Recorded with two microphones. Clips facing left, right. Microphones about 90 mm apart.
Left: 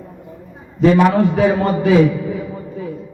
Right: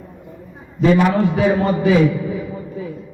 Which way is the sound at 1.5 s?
45° left (ahead or behind).